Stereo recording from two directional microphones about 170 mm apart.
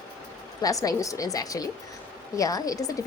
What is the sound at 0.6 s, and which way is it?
A woman's voice, 20° left (ahead or behind).